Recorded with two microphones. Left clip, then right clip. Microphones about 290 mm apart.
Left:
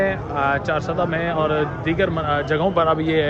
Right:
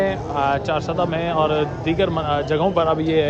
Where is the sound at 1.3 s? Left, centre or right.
Centre.